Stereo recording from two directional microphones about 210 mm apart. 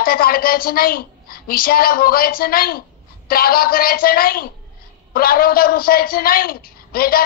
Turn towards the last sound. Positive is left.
turn(degrees=45)  # may be behind; listen again after turning